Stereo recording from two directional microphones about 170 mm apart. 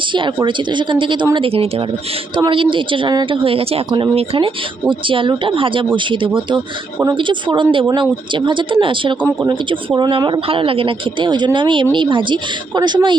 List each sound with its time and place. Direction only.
0.1 s a woman's voice: 30° right (ahead or behind)
9.2 s speech: 15° right (ahead or behind)
9.6 s a woman's voice: 25° right (ahead or behind)